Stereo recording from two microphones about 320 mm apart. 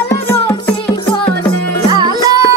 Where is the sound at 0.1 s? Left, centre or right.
Centre.